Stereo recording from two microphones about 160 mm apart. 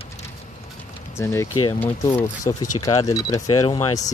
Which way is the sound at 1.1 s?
15° left (ahead or behind).